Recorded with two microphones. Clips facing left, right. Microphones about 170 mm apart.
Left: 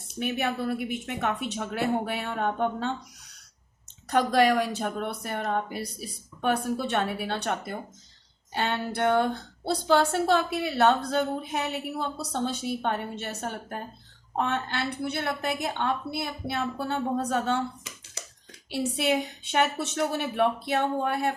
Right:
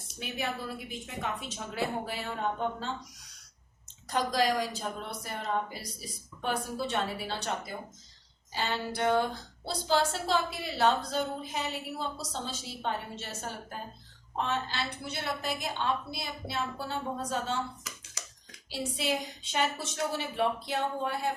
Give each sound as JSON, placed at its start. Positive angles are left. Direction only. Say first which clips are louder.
{"t": 0.2, "sound": "a woman's voice", "louder": "left 7 dB", "side_deg": 60}
{"t": 4.1, "sound": "a woman's voice", "louder": "left 6 dB", "side_deg": 60}
{"t": 18.7, "sound": "a woman's voice", "louder": "left 6 dB", "side_deg": 65}